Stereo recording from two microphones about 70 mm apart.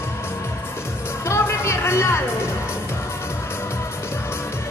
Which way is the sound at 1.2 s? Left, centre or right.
Left.